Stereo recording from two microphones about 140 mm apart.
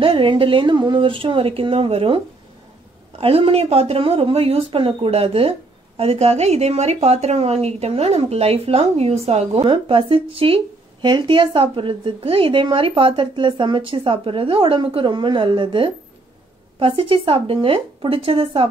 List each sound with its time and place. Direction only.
0.0 s speech: 40° right (ahead or behind)